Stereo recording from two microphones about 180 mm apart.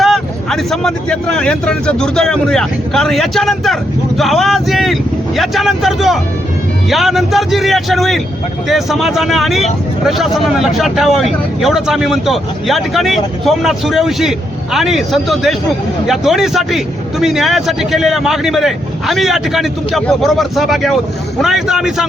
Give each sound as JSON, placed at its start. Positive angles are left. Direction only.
{"t": 0.0, "sound": "a man's voice", "side_deg": 0}